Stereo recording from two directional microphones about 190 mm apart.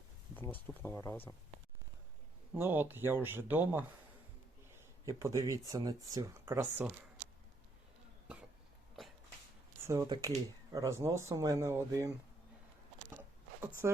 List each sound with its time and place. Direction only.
0.3 s speech: 10° left (ahead or behind)
2.6 s speech: 10° right (ahead or behind)
9.8 s speech: 15° right (ahead or behind)
13.8 s speech: 10° right (ahead or behind)